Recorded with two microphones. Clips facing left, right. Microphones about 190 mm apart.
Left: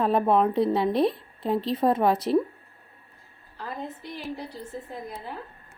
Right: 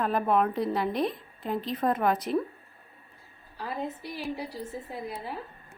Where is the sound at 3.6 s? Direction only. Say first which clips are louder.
Right 1 dB; 5° right (ahead or behind).